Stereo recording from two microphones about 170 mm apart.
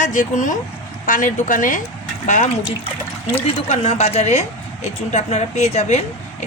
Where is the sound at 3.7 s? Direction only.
40° left (ahead or behind).